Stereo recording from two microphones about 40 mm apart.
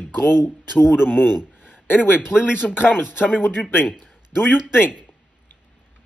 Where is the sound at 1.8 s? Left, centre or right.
Left.